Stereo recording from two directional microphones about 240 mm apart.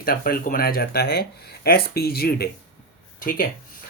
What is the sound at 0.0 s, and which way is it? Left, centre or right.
Speech, left.